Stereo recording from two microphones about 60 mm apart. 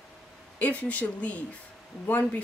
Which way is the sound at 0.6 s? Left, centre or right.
Left.